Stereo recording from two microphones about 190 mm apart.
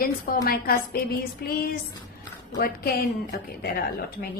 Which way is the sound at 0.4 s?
50° left (ahead or behind).